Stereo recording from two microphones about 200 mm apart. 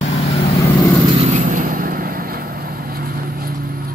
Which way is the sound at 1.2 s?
40° right (ahead or behind).